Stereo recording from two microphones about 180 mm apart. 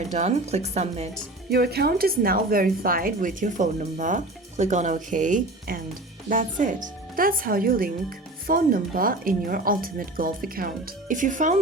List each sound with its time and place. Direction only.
0.1 s speech: 40° right (ahead or behind)
1.5 s a woman's voice: 60° right (ahead or behind); by 11.6 s 45° right (ahead or behind)